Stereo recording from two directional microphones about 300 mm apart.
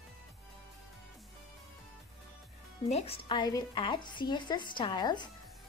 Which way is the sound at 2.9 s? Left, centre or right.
Centre.